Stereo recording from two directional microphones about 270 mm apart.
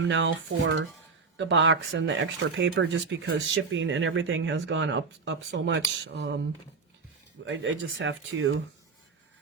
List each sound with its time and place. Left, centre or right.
0.0 s speech: right
7.4 s speech: right